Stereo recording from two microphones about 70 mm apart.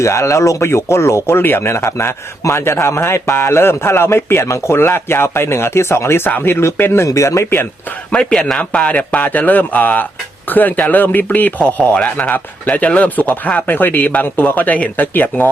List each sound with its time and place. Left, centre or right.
0.0 s speech: left
7.0 s speech: left
8.1 s a man's voice: centre